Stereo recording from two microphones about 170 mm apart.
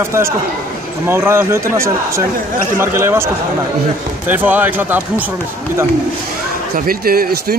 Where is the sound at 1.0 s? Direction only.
15° right (ahead or behind).